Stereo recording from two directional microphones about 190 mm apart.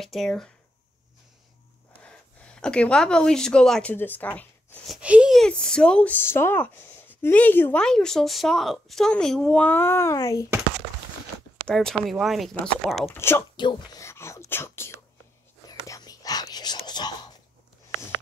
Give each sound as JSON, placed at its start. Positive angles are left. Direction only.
{"t": 0.0, "sound": "speech", "side_deg": 0}
{"t": 2.0, "sound": "speech", "side_deg": 5}
{"t": 4.9, "sound": "speech", "side_deg": -5}
{"t": 11.6, "sound": "speech", "side_deg": 0}
{"t": 13.1, "sound": "speech", "side_deg": 10}
{"t": 15.9, "sound": "whispering", "side_deg": 20}